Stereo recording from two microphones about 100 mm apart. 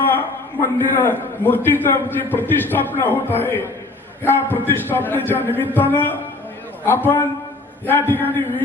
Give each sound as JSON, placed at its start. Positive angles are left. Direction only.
{"t": 0.6, "sound": "a man's voice", "side_deg": 20}